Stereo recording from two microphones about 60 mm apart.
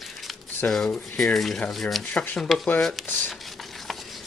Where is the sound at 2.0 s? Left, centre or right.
Centre.